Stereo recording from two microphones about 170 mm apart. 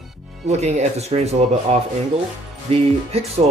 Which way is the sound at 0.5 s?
40° right (ahead or behind).